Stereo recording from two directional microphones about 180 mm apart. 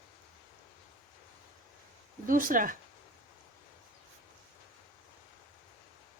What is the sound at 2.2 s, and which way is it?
Speech, 50° right (ahead or behind).